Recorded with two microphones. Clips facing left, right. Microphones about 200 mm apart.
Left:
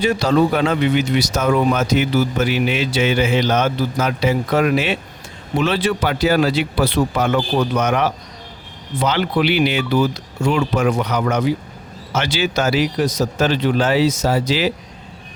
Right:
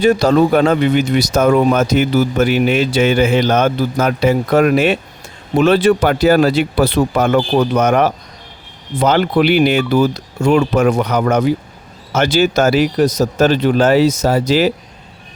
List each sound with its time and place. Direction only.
0.0 s speech: 45° right (ahead or behind)